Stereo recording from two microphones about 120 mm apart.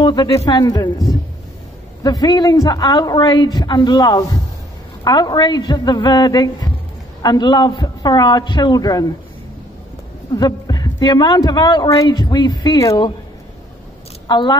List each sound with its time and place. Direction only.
0.0 s a man's voice: 35° left (ahead or behind)
10.3 s a man's voice: 35° left (ahead or behind)
14.2 s speech: 40° left (ahead or behind)